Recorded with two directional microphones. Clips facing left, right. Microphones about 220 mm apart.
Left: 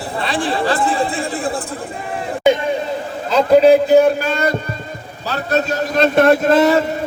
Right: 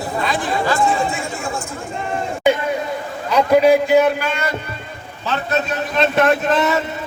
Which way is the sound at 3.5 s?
35° left (ahead or behind).